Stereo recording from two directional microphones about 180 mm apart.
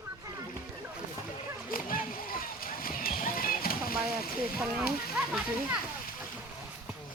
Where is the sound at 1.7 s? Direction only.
50° left (ahead or behind).